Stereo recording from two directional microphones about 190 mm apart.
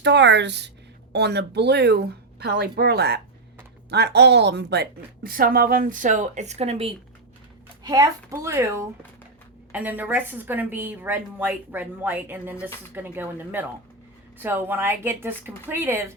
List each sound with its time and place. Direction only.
0.0 s a woman's voice: 65° right (ahead or behind); by 6.9 s 35° right (ahead or behind)
7.9 s a woman's voice: 20° right (ahead or behind)